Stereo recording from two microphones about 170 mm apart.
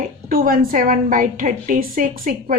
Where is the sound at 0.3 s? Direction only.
60° right (ahead or behind).